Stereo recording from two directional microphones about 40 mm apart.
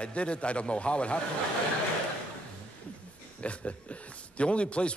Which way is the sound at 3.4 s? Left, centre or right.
Left.